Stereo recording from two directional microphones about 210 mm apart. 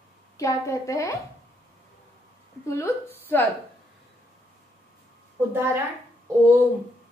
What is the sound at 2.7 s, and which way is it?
Speech, 10° left (ahead or behind).